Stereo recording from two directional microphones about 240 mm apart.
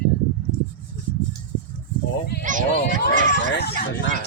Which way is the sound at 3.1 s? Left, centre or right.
Left.